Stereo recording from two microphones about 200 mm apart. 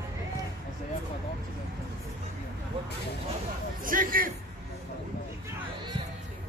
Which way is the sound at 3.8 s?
45° right (ahead or behind).